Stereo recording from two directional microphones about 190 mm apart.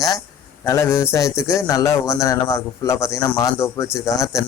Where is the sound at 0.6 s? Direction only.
15° left (ahead or behind).